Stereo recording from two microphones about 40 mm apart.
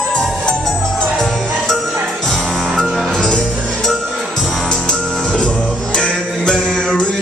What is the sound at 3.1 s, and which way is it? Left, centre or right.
Music, centre.